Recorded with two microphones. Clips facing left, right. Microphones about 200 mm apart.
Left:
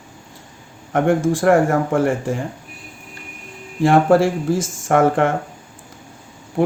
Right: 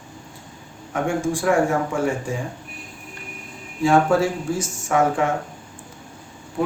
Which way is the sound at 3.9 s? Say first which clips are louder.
Left 4 dB; 50° left (ahead or behind).